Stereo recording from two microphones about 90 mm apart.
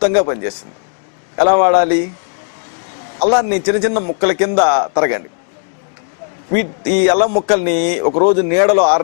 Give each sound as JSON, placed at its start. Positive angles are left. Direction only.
{"t": 0.0, "sound": "a man's voice", "side_deg": 15}
{"t": 3.2, "sound": "a man's voice", "side_deg": 15}
{"t": 6.5, "sound": "a man's voice", "side_deg": 15}